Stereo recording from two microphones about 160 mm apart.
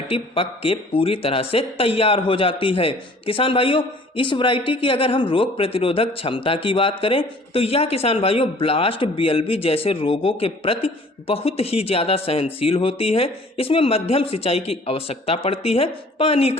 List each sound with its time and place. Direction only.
0.1 s speech: 35° left (ahead or behind)